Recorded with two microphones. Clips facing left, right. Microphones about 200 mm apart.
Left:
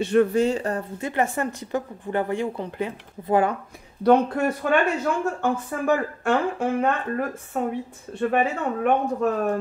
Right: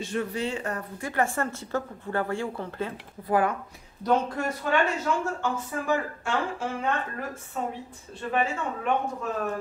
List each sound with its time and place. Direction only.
0.0 s speech: 60° left (ahead or behind); by 3.5 s 25° left (ahead or behind)
4.0 s speech: 60° left (ahead or behind)